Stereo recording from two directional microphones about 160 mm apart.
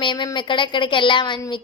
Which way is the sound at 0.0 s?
30° left (ahead or behind).